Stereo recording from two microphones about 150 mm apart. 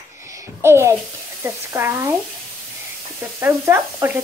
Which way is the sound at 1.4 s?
15° right (ahead or behind).